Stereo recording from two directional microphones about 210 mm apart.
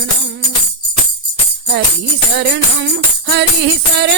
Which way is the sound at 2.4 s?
55° right (ahead or behind).